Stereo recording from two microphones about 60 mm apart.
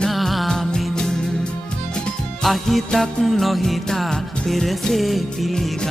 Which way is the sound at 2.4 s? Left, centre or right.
Centre.